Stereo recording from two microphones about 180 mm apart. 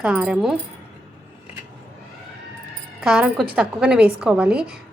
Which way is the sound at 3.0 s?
Centre (ahead or behind).